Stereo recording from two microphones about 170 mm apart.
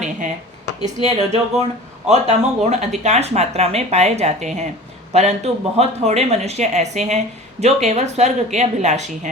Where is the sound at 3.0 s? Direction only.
40° right (ahead or behind).